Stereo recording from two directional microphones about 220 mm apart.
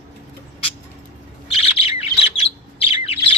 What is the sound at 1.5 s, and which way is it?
Bird, 25° left (ahead or behind).